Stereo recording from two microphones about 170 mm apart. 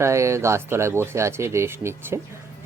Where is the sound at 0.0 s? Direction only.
15° right (ahead or behind).